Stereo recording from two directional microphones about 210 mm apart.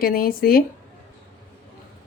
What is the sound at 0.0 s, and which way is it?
Speech, 45° left (ahead or behind).